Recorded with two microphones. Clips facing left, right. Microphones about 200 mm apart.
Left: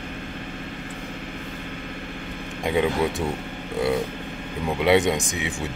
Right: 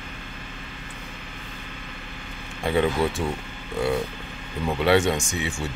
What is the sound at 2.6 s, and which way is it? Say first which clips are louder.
Speech: even; 15° left (ahead or behind).